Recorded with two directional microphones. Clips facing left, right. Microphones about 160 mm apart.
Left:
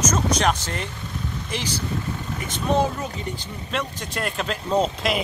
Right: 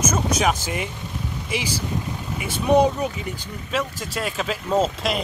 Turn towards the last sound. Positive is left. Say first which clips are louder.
# even
turn(degrees=0)  # may be behind; listen again after turning